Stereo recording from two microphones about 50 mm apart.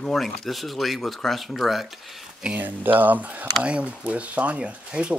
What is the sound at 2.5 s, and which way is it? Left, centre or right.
Speech, right.